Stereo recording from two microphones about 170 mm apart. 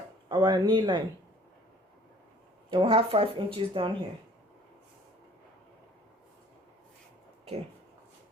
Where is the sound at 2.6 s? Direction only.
30° right (ahead or behind).